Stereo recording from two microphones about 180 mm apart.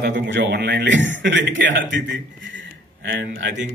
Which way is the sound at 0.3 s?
75° right (ahead or behind).